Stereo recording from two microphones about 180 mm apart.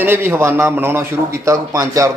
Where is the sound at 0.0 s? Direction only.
10° right (ahead or behind).